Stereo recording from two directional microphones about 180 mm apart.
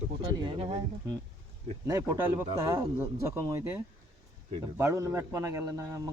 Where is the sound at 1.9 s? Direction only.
20° right (ahead or behind).